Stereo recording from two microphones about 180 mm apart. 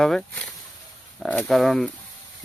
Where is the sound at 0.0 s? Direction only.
5° left (ahead or behind).